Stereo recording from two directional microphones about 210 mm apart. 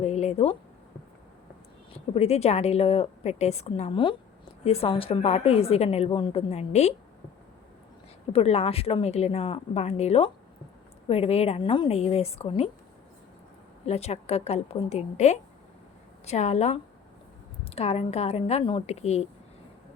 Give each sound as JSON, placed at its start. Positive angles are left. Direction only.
{"t": 0.0, "sound": "a sound", "side_deg": 30}
{"t": 2.1, "sound": "a woman's voice", "side_deg": 30}
{"t": 8.3, "sound": "a woman's voice", "side_deg": 30}
{"t": 13.8, "sound": "a woman's voice", "side_deg": 30}